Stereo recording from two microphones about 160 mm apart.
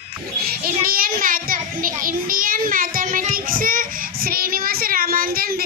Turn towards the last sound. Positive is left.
turn(degrees=-65)  # may be behind; listen again after turning